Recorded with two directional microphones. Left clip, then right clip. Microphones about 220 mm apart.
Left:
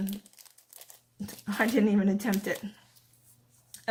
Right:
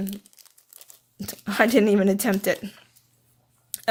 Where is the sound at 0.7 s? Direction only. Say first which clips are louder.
Right 1 dB; 20° right (ahead or behind).